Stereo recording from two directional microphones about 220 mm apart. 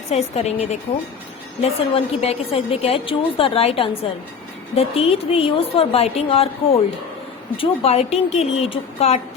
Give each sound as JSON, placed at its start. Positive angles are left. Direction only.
{"t": 0.1, "sound": "a woman's voice", "side_deg": 30}
{"t": 7.5, "sound": "a woman's voice", "side_deg": 25}